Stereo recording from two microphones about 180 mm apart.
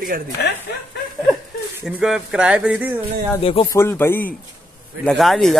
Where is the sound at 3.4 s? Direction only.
35° left (ahead or behind).